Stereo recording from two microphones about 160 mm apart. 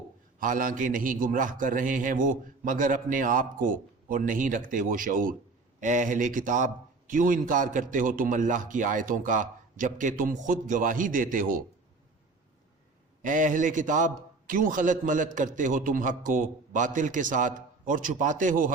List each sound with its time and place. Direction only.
0.3 s a man's voice: 55° right (ahead or behind)
13.2 s a man's voice: 55° right (ahead or behind)